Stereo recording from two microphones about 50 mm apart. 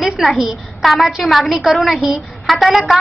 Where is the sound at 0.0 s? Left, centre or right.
Centre.